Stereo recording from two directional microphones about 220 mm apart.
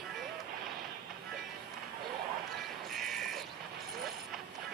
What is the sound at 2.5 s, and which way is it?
Music, centre (ahead or behind).